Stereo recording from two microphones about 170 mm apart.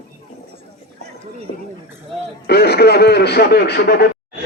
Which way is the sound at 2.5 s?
70° left (ahead or behind).